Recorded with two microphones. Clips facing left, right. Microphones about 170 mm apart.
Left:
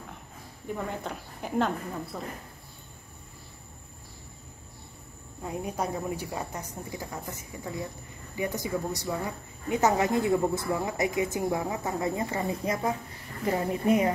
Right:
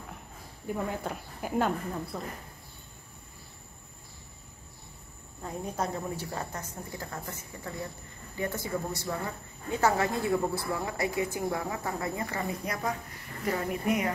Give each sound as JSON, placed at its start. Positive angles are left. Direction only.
{"t": 0.7, "sound": "speech", "side_deg": -5}
{"t": 5.4, "sound": "a woman's voice", "side_deg": 10}